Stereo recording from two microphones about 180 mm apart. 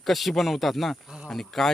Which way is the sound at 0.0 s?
Centre (ahead or behind).